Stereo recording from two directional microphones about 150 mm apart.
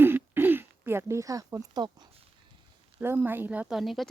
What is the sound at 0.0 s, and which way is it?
Throat clearing, 15° right (ahead or behind).